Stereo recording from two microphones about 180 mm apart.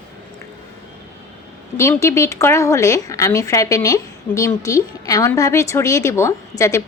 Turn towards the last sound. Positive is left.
turn(degrees=15)  # may be behind; listen again after turning